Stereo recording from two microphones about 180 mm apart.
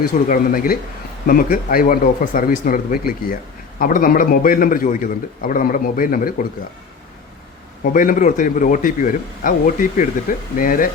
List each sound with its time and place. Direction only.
0.0 s speech: 50° left (ahead or behind)
7.9 s speech: 50° left (ahead or behind)